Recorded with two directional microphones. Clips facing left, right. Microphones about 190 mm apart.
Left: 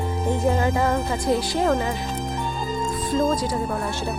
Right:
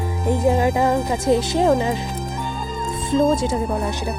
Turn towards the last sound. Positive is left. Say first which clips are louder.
# right 3 dB
turn(degrees=-20)  # may be behind; listen again after turning